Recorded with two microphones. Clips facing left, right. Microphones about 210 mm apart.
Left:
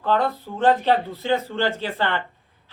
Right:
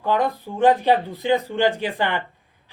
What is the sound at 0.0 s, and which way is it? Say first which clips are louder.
A woman's voice: even; 15° right (ahead or behind).